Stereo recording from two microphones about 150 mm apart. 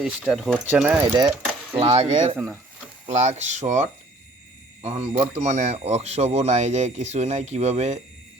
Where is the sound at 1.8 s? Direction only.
40° right (ahead or behind).